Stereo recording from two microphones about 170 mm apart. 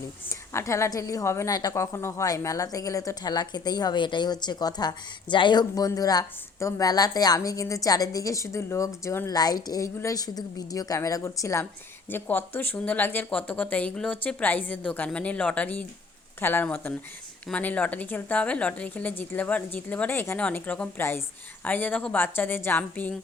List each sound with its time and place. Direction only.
0.3 s a woman's voice: 15° left (ahead or behind)